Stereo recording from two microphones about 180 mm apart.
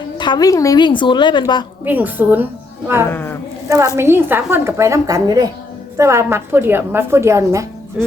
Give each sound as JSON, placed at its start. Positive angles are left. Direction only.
{"t": 0.2, "sound": "a woman's voice", "side_deg": 25}
{"t": 1.8, "sound": "a woman's voice", "side_deg": -10}
{"t": 3.1, "sound": "speech", "side_deg": 15}
{"t": 3.7, "sound": "a woman's voice", "side_deg": -15}